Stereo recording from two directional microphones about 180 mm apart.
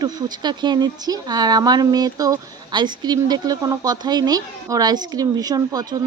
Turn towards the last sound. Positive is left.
turn(degrees=-20)  # may be behind; listen again after turning